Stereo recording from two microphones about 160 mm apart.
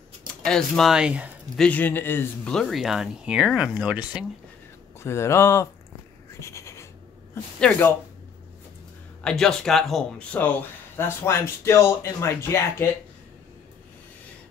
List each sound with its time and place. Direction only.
0.5 s speech: centre (ahead or behind)
1.6 s speech: 10° left (ahead or behind); by 4.3 s 5° right (ahead or behind)
5.0 s speech: 15° left (ahead or behind)
6.4 s a sound: 15° left (ahead or behind)
9.2 s speech: 5° left (ahead or behind)